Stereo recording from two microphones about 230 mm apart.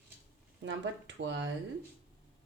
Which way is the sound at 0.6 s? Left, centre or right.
Right.